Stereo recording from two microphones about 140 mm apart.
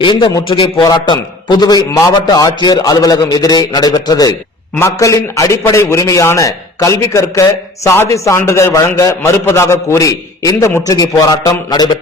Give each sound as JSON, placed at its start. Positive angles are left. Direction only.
{"t": 0.0, "sound": "a man's voice", "side_deg": 35}